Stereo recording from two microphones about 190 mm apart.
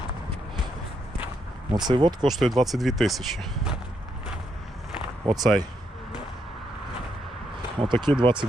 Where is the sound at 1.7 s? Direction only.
25° right (ahead or behind).